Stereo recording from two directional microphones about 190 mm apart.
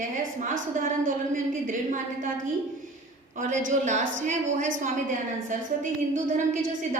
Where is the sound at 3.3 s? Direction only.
40° right (ahead or behind).